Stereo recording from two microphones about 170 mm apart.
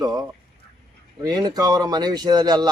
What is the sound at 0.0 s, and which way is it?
A man's voice, 20° right (ahead or behind).